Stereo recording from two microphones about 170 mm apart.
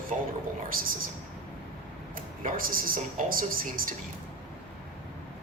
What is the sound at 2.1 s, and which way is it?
Speech, 55° right (ahead or behind).